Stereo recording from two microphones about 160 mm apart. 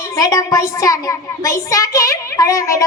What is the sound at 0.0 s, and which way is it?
A woman's voice, 20° left (ahead or behind).